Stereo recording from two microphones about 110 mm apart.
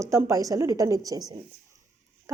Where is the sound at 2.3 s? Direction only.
30° right (ahead or behind).